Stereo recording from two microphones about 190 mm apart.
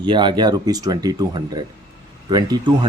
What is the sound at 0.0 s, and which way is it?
Speech, 25° right (ahead or behind).